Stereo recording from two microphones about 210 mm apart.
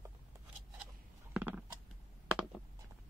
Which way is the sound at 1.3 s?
5° right (ahead or behind).